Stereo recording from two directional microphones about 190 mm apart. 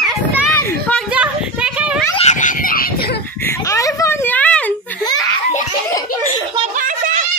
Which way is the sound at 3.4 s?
15° left (ahead or behind).